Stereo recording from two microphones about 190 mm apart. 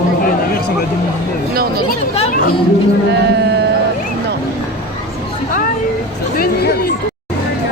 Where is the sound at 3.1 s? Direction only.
60° right (ahead or behind).